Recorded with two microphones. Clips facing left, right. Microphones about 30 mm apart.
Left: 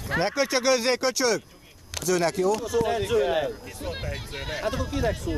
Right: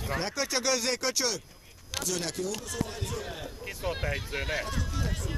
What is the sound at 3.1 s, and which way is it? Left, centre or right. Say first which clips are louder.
Speech: left 16 dB; left.